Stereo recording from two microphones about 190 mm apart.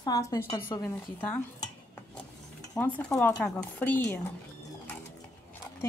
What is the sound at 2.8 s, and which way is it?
Speech, 10° left (ahead or behind).